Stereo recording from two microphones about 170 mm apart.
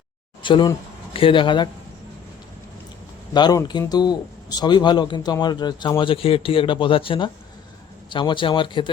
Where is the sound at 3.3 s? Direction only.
25° left (ahead or behind).